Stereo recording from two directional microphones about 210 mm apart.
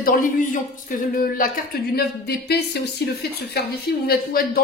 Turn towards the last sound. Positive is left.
turn(degrees=45)  # may be behind; listen again after turning